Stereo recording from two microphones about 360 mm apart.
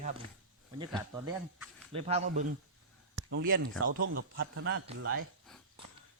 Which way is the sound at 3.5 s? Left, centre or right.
Right.